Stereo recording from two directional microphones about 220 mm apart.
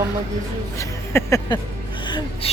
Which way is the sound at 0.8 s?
15° left (ahead or behind).